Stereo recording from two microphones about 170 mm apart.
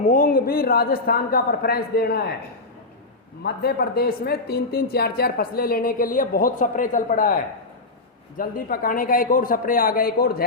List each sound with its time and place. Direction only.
0.0 s speech: 55° left (ahead or behind)
3.4 s speech: 70° left (ahead or behind); by 7.3 s 50° left (ahead or behind)
8.4 s speech: 55° left (ahead or behind)